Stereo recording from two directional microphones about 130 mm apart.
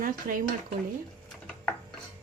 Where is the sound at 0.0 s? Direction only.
90° right.